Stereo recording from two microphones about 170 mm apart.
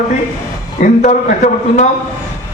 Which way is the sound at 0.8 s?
45° left (ahead or behind).